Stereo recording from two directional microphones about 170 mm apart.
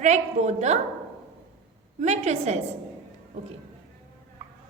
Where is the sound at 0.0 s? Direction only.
45° right (ahead or behind).